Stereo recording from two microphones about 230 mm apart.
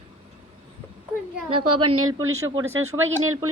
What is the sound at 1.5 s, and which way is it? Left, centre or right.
Speech, right.